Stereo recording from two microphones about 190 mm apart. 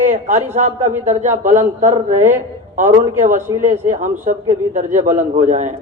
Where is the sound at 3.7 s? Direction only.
40° right (ahead or behind).